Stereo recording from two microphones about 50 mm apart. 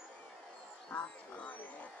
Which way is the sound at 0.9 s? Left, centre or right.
Left.